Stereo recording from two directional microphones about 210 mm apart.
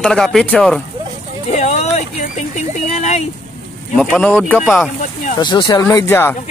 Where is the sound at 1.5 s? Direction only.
30° left (ahead or behind).